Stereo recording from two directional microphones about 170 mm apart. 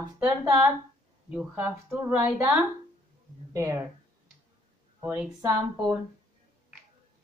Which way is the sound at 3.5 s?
15° right (ahead or behind).